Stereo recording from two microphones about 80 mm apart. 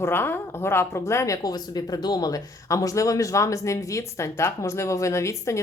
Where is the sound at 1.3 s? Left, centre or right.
Left.